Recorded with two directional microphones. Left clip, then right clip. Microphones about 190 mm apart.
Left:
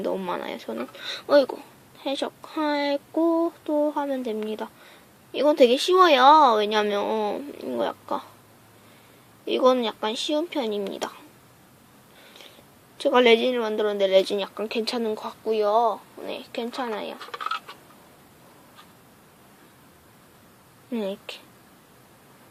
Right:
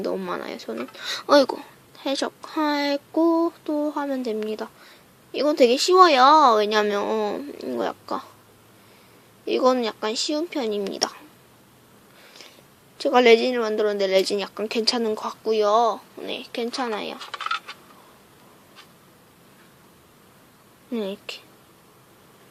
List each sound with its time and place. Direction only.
0.0 s speech: 5° right (ahead or behind)
0.9 s speech: 15° right (ahead or behind)
9.5 s speech: 5° right (ahead or behind)
13.0 s speech: 5° right (ahead or behind)
17.2 s speech: 30° right (ahead or behind)
20.9 s speech: 5° right (ahead or behind)